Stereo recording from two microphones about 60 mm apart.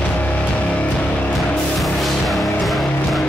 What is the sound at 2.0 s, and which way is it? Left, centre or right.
Music, centre.